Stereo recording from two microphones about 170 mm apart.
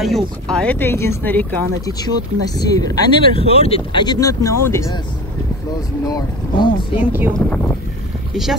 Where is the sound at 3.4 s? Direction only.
35° left (ahead or behind); by 4.9 s 15° left (ahead or behind).